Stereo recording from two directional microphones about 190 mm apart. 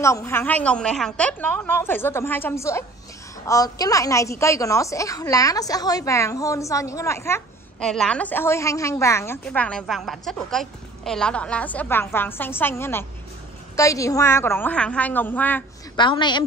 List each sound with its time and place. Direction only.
0.0 s a woman's voice: 15° left (ahead or behind)
16.0 s a woman's voice: 25° left (ahead or behind)